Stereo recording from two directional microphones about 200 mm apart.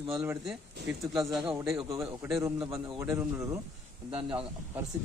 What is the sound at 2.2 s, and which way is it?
Speech, 10° right (ahead or behind).